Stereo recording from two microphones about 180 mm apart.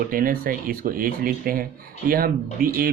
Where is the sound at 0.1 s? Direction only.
50° right (ahead or behind).